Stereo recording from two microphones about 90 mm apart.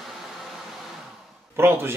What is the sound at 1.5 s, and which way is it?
Speech, 25° right (ahead or behind).